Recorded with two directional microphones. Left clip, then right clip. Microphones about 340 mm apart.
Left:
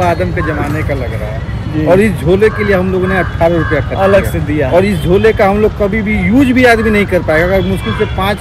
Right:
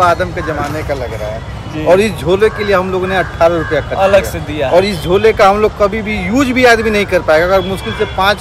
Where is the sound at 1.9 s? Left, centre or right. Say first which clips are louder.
Left 3 dB; centre.